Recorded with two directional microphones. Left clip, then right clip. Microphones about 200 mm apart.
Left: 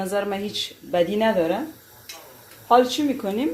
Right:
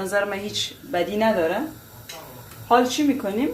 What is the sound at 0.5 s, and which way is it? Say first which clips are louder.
Speech: left 2 dB; 65° left (ahead or behind).